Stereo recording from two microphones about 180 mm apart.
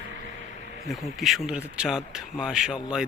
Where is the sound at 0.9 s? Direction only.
Centre (ahead or behind).